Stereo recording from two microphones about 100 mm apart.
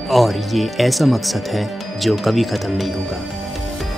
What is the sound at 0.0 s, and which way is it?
Speech, centre (ahead or behind).